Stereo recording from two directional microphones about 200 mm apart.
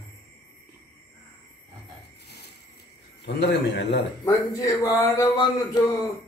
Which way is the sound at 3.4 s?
60° left (ahead or behind).